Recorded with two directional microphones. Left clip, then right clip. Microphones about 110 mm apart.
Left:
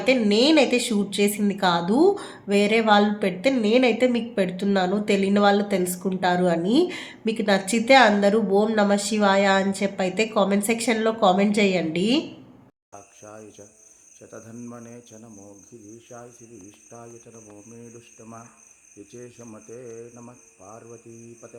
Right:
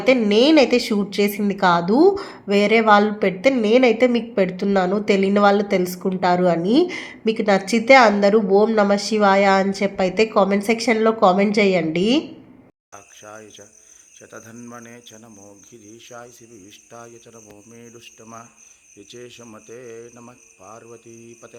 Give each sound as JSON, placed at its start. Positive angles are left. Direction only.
{"t": 0.0, "sound": "a woman's voice", "side_deg": -25}
{"t": 12.9, "sound": "speech", "side_deg": 5}
{"t": 19.2, "sound": "a woman's voice", "side_deg": -20}